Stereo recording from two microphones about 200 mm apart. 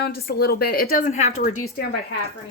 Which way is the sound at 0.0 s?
50° left (ahead or behind).